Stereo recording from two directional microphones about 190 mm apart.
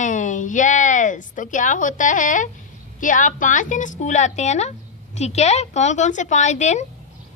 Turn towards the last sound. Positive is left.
turn(degrees=35)  # may be behind; listen again after turning